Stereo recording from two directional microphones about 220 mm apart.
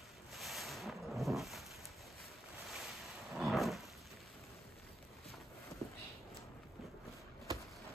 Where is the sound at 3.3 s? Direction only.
Centre (ahead or behind).